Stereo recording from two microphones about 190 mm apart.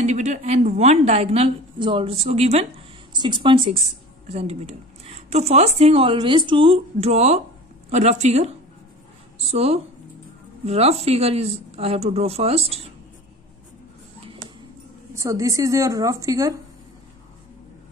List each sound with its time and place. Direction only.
0.0 s a woman's voice: 40° right (ahead or behind)
15.1 s speech: 15° right (ahead or behind)